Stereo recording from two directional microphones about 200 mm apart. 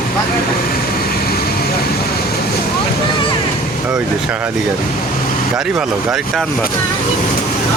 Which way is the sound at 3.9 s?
5° right (ahead or behind).